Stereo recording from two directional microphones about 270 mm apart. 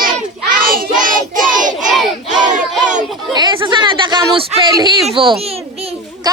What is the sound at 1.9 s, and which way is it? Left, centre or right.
Battle cry, centre.